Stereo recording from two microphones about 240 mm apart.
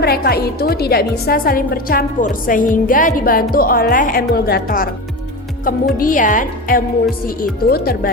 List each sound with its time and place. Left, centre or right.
0.0 s a woman's voice: left
6.0 s a woman's voice: left